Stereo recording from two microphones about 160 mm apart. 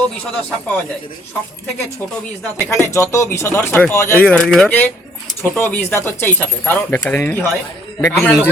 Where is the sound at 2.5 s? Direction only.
20° left (ahead or behind).